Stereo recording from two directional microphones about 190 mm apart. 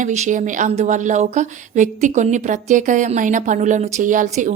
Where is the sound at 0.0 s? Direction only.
40° right (ahead or behind).